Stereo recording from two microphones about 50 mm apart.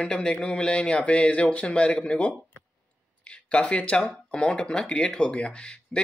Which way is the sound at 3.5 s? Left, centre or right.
Left.